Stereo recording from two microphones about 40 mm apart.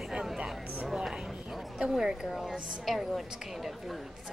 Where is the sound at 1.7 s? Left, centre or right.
Centre.